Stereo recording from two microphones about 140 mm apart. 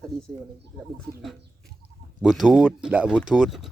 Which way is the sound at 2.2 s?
Centre (ahead or behind).